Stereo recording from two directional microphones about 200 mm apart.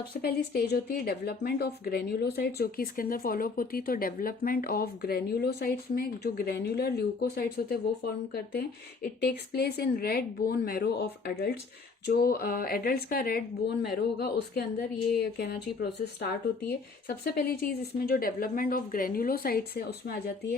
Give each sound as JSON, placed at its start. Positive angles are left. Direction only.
{"t": 0.1, "sound": "speech", "side_deg": 50}